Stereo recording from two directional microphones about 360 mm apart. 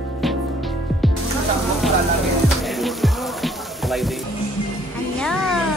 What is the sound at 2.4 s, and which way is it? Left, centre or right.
Music, centre.